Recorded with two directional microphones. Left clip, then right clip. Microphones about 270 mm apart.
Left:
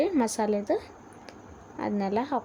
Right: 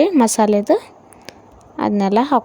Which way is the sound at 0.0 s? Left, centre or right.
Right.